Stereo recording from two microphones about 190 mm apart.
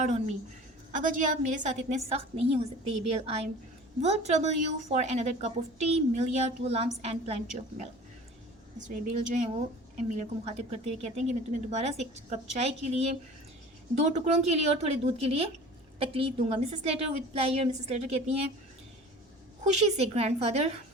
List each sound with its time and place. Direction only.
0.0 s a woman's voice: 40° right (ahead or behind)
14.1 s a woman's voice: 35° right (ahead or behind)
19.6 s a woman's voice: 35° right (ahead or behind)